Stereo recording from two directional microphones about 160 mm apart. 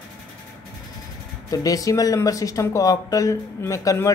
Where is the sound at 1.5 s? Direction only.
20° left (ahead or behind).